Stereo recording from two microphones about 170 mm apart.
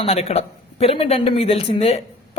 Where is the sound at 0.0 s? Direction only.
35° left (ahead or behind).